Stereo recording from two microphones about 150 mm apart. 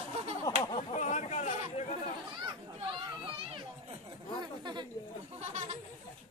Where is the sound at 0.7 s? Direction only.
45° left (ahead or behind).